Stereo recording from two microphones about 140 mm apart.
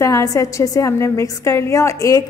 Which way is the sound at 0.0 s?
25° left (ahead or behind).